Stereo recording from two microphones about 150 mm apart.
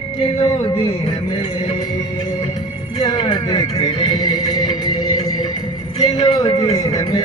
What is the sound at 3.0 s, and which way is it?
Music, 25° left (ahead or behind).